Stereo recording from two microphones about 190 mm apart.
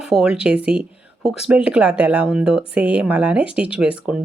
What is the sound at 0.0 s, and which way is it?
Speech, 5° right (ahead or behind).